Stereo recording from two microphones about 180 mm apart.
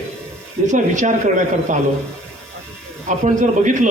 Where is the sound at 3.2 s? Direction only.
45° right (ahead or behind).